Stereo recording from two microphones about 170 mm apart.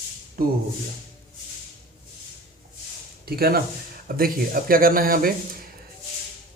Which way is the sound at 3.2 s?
65° right (ahead or behind).